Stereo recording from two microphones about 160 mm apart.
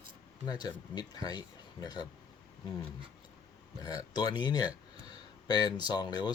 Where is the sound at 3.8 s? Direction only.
25° left (ahead or behind).